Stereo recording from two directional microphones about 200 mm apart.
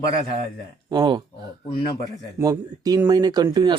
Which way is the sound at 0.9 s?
25° right (ahead or behind).